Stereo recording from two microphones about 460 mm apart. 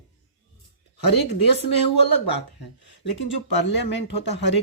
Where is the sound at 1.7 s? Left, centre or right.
Left.